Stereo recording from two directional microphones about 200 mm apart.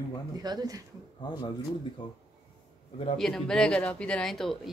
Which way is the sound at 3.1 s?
Centre (ahead or behind).